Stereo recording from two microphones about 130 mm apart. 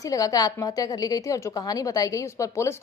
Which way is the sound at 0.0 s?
25° left (ahead or behind).